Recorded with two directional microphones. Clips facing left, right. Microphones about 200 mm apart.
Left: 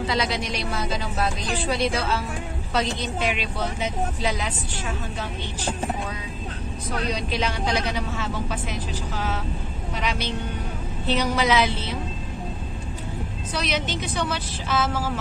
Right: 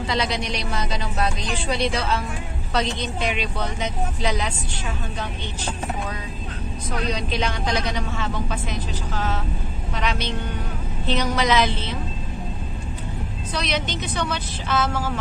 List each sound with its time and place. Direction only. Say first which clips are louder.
0.0 s a woman's voice: even; 5° left (ahead or behind)
7.1 s speech: right 1 dB; 5° left (ahead or behind)
13.5 s speech: right 1 dB; 10° left (ahead or behind)